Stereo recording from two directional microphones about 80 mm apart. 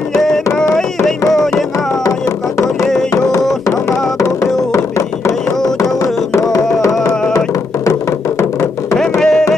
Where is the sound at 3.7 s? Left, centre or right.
Left.